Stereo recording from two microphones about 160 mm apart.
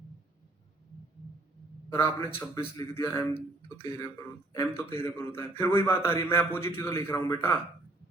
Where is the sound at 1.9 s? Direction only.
15° left (ahead or behind).